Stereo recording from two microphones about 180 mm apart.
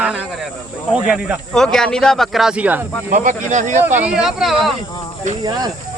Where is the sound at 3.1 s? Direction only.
40° right (ahead or behind).